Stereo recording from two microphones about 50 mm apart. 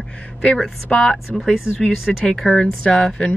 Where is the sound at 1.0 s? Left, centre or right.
Centre.